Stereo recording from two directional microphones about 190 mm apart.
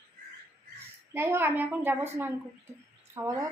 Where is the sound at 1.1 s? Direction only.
10° right (ahead or behind).